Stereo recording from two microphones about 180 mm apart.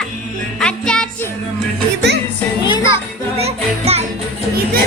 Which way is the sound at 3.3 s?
35° right (ahead or behind).